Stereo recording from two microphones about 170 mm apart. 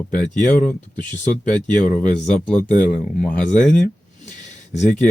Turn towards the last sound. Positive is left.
turn(degrees=10)  # may be behind; listen again after turning